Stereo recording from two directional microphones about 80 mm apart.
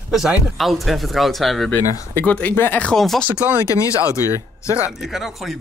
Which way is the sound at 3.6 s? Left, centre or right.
Left.